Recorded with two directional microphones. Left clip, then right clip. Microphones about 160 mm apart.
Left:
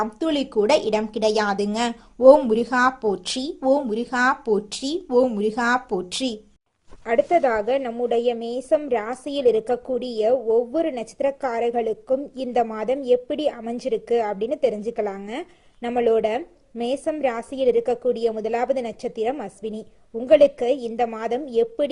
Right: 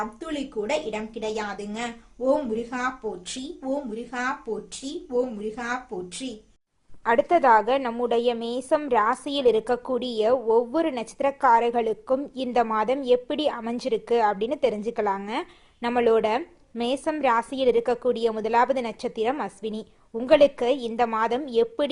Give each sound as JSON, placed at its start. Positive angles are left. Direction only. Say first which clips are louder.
{"t": 0.0, "sound": "speech", "louder": "left 8 dB", "side_deg": 45}
{"t": 7.0, "sound": "a woman's voice", "louder": "left 1 dB", "side_deg": 0}